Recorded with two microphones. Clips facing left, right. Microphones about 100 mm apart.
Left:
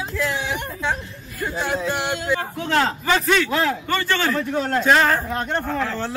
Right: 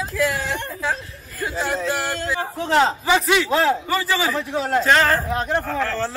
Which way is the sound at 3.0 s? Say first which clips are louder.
Right 1 dB; 10° right (ahead or behind).